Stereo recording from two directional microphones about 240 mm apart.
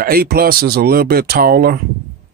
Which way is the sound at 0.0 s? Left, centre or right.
Right.